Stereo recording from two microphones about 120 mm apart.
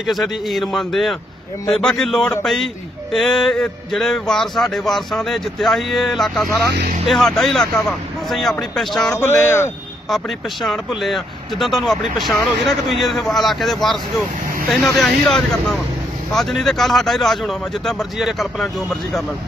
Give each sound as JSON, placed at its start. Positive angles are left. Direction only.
{"t": 0.0, "sound": "a man's voice", "side_deg": 0}
{"t": 9.1, "sound": "speech", "side_deg": 20}
{"t": 10.0, "sound": "a man's voice", "side_deg": 0}